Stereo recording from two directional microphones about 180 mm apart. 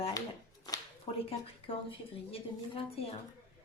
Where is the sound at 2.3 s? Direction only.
30° left (ahead or behind).